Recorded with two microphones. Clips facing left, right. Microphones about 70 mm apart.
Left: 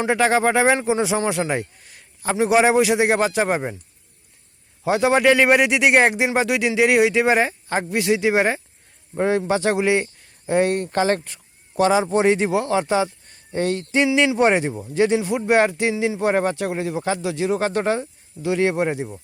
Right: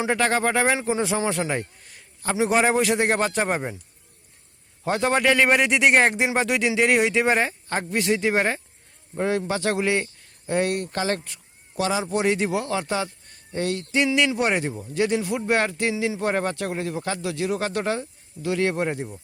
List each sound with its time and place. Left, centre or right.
0.1 s speech: centre
2.3 s a man's voice: centre
4.8 s a man's voice: centre
9.1 s speech: left
13.5 s a sound: left
14.3 s speech: left